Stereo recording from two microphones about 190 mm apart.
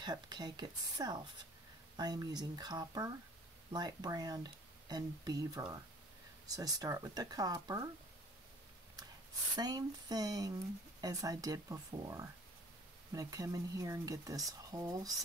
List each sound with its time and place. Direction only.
0.0 s speech: 20° right (ahead or behind)
9.6 s speech: 20° right (ahead or behind)